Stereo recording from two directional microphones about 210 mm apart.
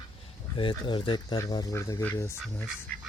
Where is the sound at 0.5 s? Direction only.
25° left (ahead or behind).